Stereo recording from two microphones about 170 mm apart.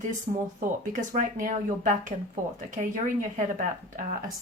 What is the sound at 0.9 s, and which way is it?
Speech, 50° right (ahead or behind).